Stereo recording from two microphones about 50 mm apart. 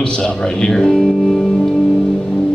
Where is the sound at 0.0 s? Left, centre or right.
Centre.